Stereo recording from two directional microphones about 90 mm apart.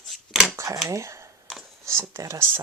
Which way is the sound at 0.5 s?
30° right (ahead or behind).